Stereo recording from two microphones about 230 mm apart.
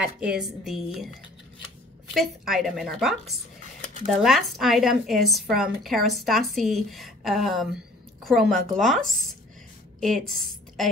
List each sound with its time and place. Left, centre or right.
0.0 s a woman's voice: centre
2.1 s a woman's voice: centre